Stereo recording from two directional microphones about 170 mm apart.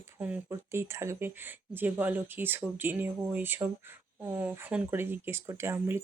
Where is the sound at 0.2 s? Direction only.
10° right (ahead or behind).